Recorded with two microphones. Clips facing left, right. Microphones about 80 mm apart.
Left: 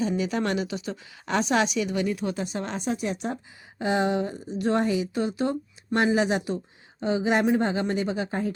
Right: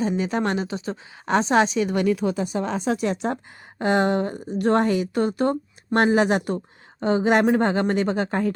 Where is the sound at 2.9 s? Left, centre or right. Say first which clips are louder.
Right 4 dB; right.